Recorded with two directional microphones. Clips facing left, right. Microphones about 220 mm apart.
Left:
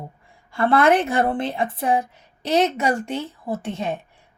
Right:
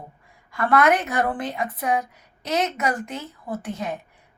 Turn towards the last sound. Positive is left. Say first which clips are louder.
# left 3 dB
turn(degrees=25)  # may be behind; listen again after turning